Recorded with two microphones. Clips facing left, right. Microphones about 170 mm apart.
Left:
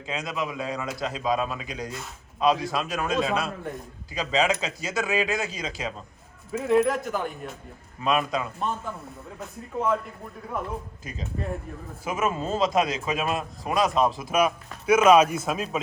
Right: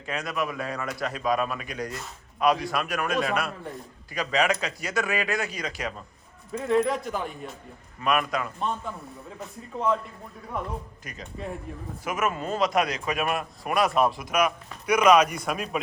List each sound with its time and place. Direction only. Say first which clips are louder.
0.1 s a man's voice: right 1 dB; 20° left (ahead or behind)
6.5 s speech: left 2 dB; 5° left (ahead or behind)
8.0 s a man's voice: left 1 dB; 25° left (ahead or behind)
8.5 s speech: even; 5° left (ahead or behind)
12.0 s a man's voice: left 1 dB; 25° left (ahead or behind)